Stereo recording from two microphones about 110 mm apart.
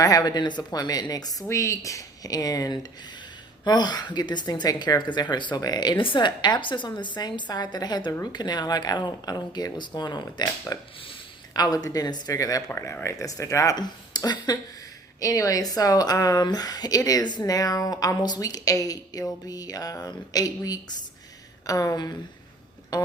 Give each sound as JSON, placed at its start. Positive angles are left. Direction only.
{"t": 0.0, "sound": "a woman's voice", "side_deg": 35}
{"t": 13.7, "sound": "a woman's voice", "side_deg": 40}